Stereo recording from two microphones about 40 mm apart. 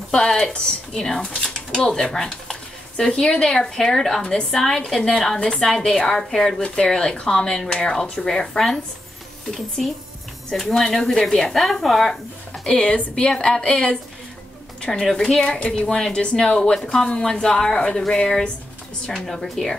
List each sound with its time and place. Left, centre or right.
0.1 s a woman's voice: centre
4.2 s a woman's voice: left
4.5 s a woman's voice: centre
10.5 s speech: centre
12.6 s a woman's voice: left
13.1 s a woman's voice: left
14.8 s a woman's voice: centre
17.2 s speech: centre